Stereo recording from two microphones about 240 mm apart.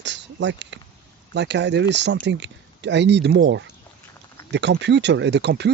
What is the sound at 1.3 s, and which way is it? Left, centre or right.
Speech, right.